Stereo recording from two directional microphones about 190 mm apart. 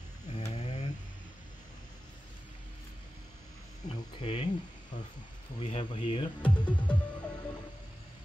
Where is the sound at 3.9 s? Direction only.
35° left (ahead or behind).